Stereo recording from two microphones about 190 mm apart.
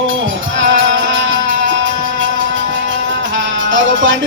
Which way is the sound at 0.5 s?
70° right (ahead or behind).